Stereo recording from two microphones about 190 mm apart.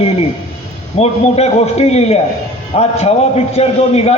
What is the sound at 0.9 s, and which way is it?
A man's voice, 35° left (ahead or behind).